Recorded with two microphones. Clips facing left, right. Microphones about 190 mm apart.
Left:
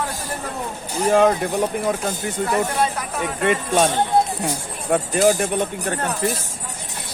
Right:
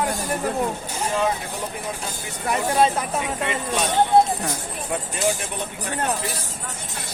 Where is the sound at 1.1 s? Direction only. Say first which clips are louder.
Left 8 dB; 60° left (ahead or behind).